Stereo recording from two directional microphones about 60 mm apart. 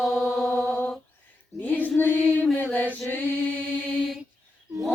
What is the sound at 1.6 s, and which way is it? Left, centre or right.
Female singing, left.